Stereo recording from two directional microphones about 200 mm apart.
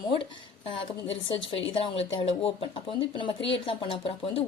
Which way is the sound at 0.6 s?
30° left (ahead or behind).